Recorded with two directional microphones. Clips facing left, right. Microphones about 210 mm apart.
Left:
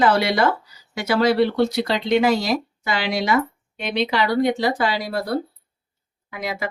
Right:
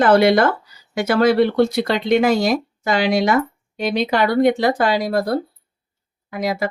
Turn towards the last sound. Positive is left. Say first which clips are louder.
# right 6 dB
turn(degrees=-40)  # may be behind; listen again after turning